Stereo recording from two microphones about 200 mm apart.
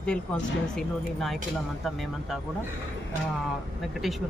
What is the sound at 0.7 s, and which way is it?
Speech, centre (ahead or behind).